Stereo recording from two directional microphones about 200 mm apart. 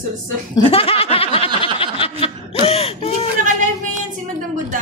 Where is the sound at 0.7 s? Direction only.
30° left (ahead or behind).